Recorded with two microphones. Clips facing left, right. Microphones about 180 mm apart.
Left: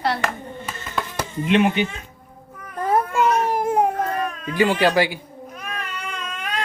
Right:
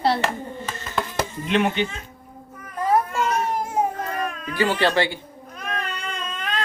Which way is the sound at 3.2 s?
60° left (ahead or behind).